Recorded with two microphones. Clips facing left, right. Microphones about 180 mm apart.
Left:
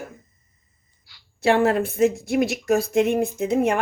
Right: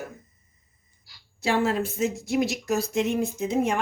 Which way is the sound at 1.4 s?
60° left (ahead or behind).